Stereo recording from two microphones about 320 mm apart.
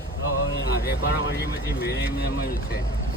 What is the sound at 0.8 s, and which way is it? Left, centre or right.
Speech, left.